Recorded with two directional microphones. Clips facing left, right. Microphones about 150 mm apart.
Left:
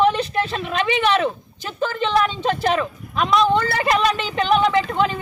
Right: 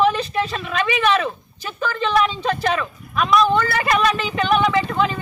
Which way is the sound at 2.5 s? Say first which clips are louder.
Left 1 dB; 30° left (ahead or behind).